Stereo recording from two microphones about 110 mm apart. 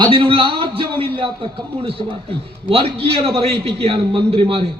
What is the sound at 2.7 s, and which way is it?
A man's voice, 60° right (ahead or behind).